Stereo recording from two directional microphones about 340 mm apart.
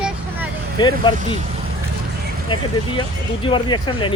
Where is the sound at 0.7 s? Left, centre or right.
Centre.